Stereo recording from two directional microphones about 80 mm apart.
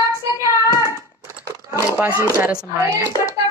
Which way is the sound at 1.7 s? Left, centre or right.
Right.